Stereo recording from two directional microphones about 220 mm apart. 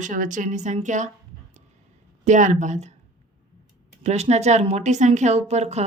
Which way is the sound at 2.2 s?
35° right (ahead or behind).